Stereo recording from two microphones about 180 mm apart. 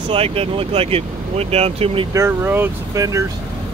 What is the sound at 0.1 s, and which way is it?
Speech, 30° right (ahead or behind).